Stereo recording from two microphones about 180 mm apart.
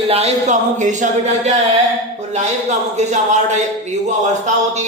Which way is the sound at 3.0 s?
40° right (ahead or behind).